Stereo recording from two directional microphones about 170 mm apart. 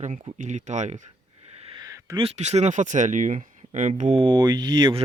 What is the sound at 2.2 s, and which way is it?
Speech, 40° right (ahead or behind).